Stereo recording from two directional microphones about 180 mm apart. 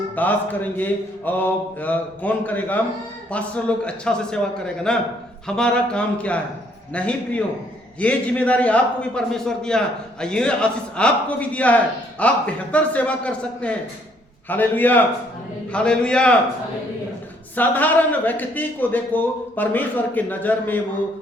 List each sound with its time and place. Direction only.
0.2 s a man's voice: 10° left (ahead or behind)
17.5 s a man's voice: 10° left (ahead or behind)